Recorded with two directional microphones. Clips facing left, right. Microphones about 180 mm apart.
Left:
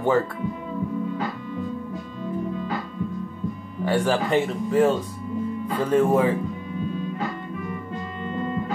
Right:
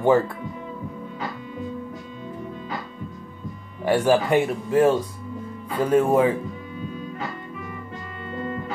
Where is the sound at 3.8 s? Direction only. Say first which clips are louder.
Right 3 dB; 15° right (ahead or behind).